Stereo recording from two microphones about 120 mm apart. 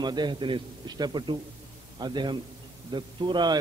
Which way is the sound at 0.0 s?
35° right (ahead or behind).